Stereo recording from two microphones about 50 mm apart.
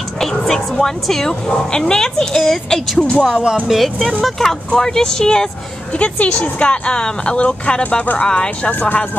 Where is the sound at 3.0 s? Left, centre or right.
Left.